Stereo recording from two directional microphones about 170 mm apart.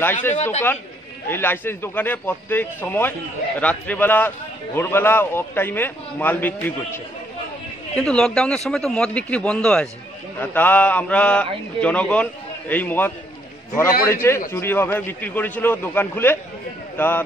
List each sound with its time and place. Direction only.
0.3 s speech: 40° left (ahead or behind)
1.3 s a man's voice: 10° left (ahead or behind)